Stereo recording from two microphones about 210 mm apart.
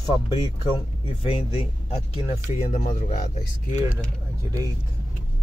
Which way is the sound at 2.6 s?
35° left (ahead or behind).